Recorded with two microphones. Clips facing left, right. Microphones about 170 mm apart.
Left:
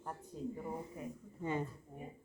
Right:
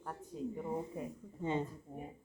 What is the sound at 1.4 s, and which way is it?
Speech, 25° right (ahead or behind).